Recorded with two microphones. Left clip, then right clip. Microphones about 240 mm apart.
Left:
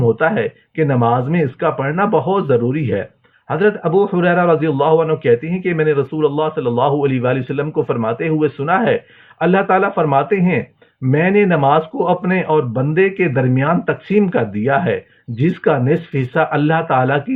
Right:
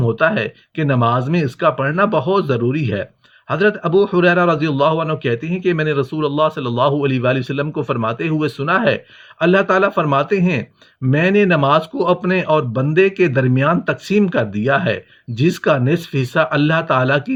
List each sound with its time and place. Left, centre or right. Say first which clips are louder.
0.2 s speech: even; right